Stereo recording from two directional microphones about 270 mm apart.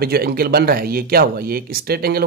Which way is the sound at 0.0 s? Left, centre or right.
Right.